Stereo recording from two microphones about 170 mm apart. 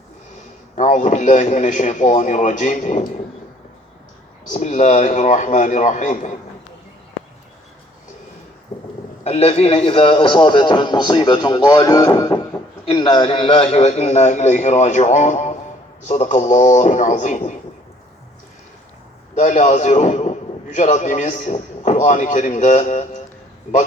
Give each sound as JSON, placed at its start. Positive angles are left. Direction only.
{"t": 0.8, "sound": "a man's voice", "side_deg": 45}
{"t": 4.7, "sound": "a man's voice", "side_deg": 45}
{"t": 9.2, "sound": "a man's voice", "side_deg": 35}
{"t": 19.4, "sound": "a man's voice", "side_deg": 45}